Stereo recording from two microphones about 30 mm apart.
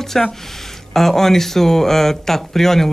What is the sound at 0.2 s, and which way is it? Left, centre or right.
Speech, centre.